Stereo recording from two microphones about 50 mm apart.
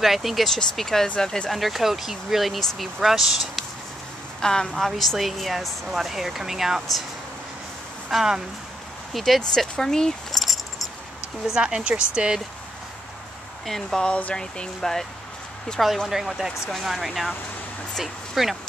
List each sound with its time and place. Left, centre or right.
0.0 s speech: centre
1.0 s speech: centre
1.5 s speech: centre
4.4 s speech: centre
4.7 s speech: centre
8.1 s speech: centre
11.4 s speech: centre
13.7 s speech: centre
14.0 s speech: left
14.4 s speech: centre
16.1 s speech: centre